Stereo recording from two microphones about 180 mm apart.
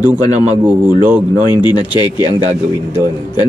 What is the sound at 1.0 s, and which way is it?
Speech, 10° right (ahead or behind).